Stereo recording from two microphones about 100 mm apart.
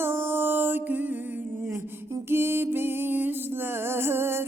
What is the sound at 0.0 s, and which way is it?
Mantra, 25° right (ahead or behind).